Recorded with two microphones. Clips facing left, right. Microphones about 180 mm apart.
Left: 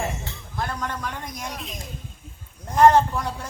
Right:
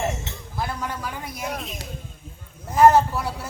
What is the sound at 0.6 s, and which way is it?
Speech, 10° right (ahead or behind).